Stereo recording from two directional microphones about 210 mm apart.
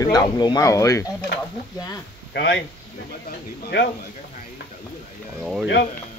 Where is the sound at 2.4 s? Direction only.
55° left (ahead or behind).